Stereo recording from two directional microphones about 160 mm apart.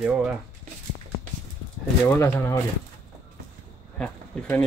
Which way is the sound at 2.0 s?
15° left (ahead or behind).